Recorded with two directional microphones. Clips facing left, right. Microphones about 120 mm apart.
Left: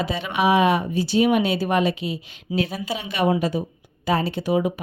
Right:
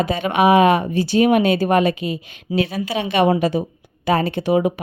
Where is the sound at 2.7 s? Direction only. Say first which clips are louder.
Right 7 dB; 70° right (ahead or behind).